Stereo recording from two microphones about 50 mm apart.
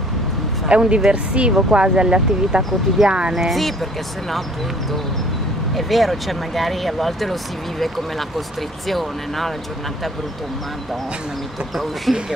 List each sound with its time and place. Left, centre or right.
0.7 s speech: right
3.3 s speech: centre
5.8 s speech: centre
8.8 s speech: centre
11.7 s speech: centre